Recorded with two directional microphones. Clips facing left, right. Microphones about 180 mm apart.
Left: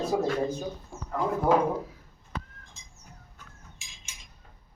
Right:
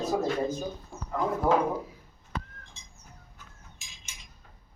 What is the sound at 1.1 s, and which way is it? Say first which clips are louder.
Speech: left 1 dB; 5° left (ahead or behind).